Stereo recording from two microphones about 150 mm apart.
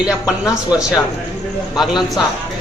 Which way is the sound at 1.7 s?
Centre (ahead or behind).